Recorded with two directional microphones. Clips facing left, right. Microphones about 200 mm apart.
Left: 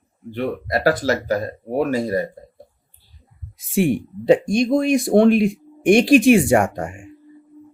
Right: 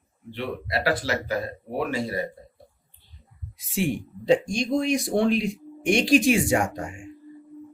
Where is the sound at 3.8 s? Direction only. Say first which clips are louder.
Left 7 dB; 60° left (ahead or behind).